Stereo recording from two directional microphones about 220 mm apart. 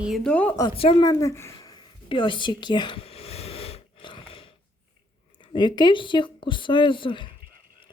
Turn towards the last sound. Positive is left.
turn(degrees=20)  # may be behind; listen again after turning